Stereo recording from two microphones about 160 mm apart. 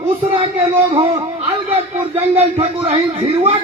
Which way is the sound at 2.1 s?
35° right (ahead or behind).